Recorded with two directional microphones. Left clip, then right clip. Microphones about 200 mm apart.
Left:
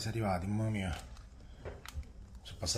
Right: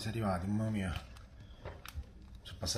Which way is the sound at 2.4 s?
10° left (ahead or behind).